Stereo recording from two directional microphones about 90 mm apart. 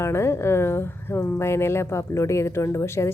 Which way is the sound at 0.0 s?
30° left (ahead or behind).